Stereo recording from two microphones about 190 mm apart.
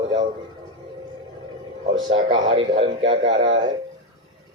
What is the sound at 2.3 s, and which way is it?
Speech, 90° right.